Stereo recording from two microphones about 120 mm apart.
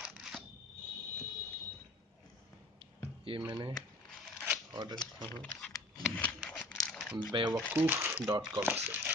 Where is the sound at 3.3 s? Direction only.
50° right (ahead or behind).